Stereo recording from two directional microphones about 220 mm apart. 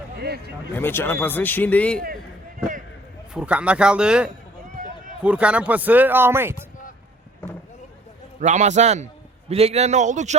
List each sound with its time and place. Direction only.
0.2 s speech: 45° right (ahead or behind)
0.7 s a man's voice: 10° left (ahead or behind)
3.3 s a man's voice: 5° right (ahead or behind)
8.4 s a man's voice: 35° right (ahead or behind)